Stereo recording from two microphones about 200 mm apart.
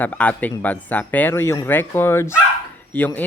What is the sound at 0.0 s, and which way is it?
Speech, 10° left (ahead or behind).